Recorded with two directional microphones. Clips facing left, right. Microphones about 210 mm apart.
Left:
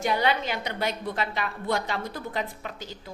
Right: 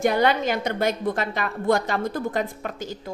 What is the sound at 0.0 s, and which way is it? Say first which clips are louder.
A woman's voice: right 5 dB; 45° right (ahead or behind).